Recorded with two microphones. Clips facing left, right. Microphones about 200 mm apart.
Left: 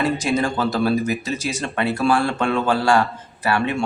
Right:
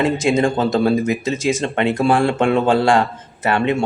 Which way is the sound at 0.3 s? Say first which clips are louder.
Right 4 dB; 25° right (ahead or behind).